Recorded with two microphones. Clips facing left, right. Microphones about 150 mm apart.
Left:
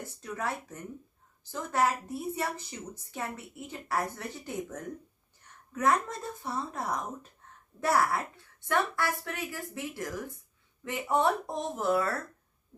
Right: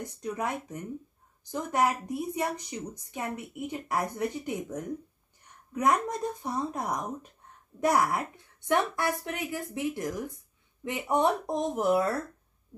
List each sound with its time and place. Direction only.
0.0 s a woman's voice: 15° right (ahead or behind)